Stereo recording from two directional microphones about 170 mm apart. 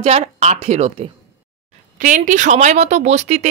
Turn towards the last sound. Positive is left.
turn(degrees=-40)  # may be behind; listen again after turning